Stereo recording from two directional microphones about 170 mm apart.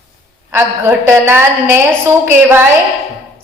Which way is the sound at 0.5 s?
15° right (ahead or behind).